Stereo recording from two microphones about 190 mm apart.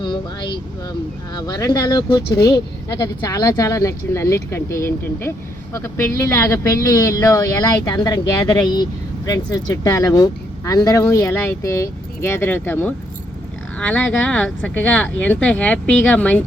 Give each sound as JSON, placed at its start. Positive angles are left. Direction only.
{"t": 0.0, "sound": "speech", "side_deg": 25}